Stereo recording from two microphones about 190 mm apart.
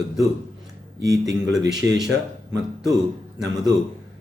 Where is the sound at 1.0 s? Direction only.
20° right (ahead or behind).